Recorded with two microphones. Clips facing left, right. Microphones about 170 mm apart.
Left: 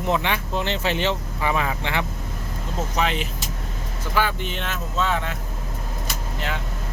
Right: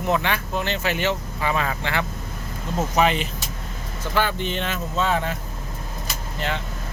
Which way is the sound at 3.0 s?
5° right (ahead or behind).